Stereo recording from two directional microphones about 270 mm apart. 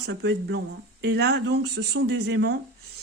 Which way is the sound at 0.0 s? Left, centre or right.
Right.